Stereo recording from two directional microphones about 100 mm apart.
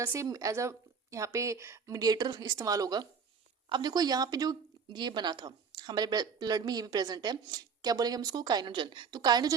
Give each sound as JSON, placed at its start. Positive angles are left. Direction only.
{"t": 0.0, "sound": "a woman's voice", "side_deg": -30}